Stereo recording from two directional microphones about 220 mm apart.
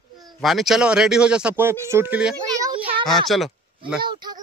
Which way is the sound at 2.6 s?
25° right (ahead or behind).